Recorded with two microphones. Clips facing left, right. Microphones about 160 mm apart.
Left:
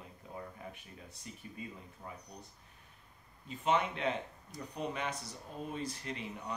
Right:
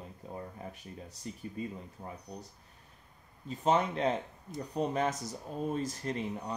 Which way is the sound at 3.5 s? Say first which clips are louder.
Right 4 dB; 40° right (ahead or behind).